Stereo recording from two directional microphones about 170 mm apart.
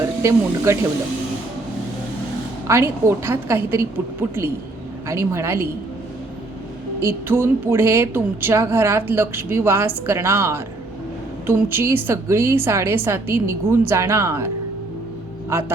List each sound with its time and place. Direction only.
0.0 s speech: 15° right (ahead or behind)
2.6 s speech: 15° right (ahead or behind)
7.0 s speech: 15° right (ahead or behind)